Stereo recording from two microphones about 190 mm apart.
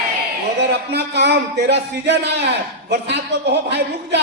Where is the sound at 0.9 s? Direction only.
60° right (ahead or behind).